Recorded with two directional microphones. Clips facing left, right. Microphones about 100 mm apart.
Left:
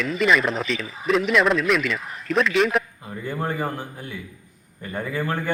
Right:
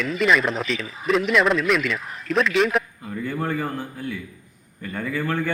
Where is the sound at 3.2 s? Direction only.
20° left (ahead or behind).